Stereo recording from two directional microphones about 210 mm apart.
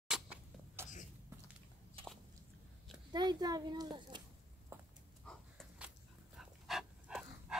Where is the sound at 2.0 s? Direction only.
25° right (ahead or behind).